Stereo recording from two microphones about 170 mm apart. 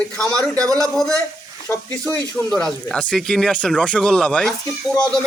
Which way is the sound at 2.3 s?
5° left (ahead or behind).